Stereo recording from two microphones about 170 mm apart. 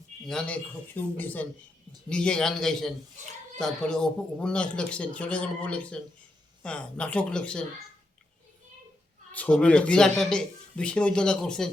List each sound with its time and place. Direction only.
0.3 s a man's voice: 5° left (ahead or behind)
9.3 s speech: 5° left (ahead or behind)